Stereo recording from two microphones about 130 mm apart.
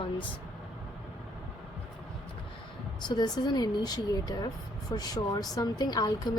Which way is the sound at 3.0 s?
35° left (ahead or behind).